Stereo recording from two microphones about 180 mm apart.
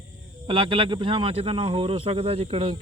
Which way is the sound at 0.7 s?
30° right (ahead or behind).